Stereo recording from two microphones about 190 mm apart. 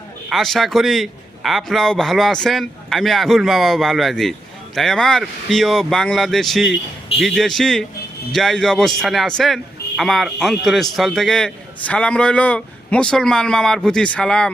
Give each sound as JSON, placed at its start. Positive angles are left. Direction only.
{"t": 0.3, "sound": "a man's voice", "side_deg": 0}